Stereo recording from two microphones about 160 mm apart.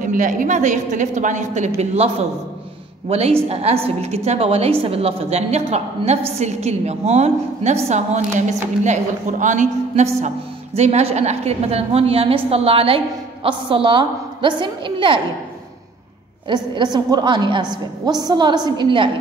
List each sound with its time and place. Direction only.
0.0 s a woman's voice: 55° right (ahead or behind); by 15.1 s 30° right (ahead or behind)
16.4 s a woman's voice: 30° right (ahead or behind)